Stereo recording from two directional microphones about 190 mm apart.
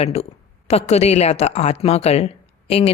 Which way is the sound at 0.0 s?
35° left (ahead or behind).